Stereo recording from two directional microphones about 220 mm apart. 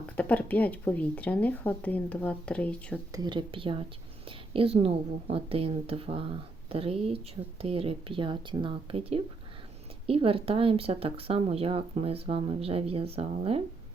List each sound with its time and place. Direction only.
0.0 s speech: 5° left (ahead or behind)
3.1 s speech: 20° right (ahead or behind)